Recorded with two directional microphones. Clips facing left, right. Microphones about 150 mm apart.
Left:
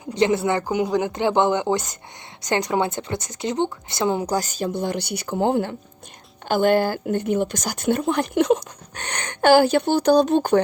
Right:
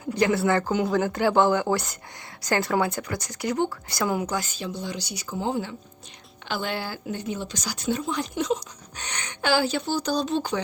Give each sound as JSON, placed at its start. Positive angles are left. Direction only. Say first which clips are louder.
{"t": 0.1, "sound": "a woman's voice", "louder": "left 2 dB", "side_deg": 20}
{"t": 6.5, "sound": "a woman's voice", "louder": "left 12 dB", "side_deg": 50}